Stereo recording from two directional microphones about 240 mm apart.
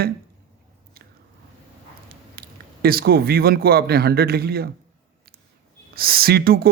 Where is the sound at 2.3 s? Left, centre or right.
Right.